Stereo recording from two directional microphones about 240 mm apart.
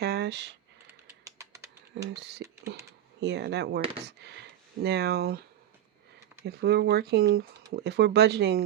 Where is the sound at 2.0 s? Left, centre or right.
Right.